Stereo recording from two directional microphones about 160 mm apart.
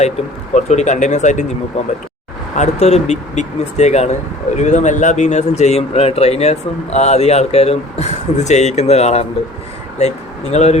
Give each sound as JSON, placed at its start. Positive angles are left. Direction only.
{"t": 0.5, "sound": "speech", "side_deg": 45}
{"t": 2.6, "sound": "speech", "side_deg": 45}
{"t": 10.5, "sound": "speech", "side_deg": 45}